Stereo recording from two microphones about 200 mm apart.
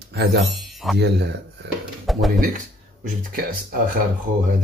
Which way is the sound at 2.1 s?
Centre (ahead or behind).